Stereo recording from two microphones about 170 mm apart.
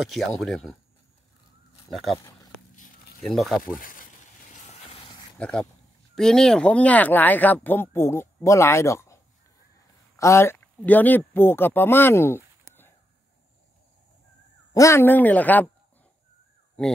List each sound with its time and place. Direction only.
0.0 s speech: centre (ahead or behind)
1.9 s speech: centre (ahead or behind)
2.7 s a sound: 50° left (ahead or behind)
3.2 s speech: centre (ahead or behind)
3.8 s a sound: 55° left (ahead or behind)
5.4 s speech: 5° left (ahead or behind)
14.7 s speech: 15° left (ahead or behind)
16.8 s speech: 5° left (ahead or behind)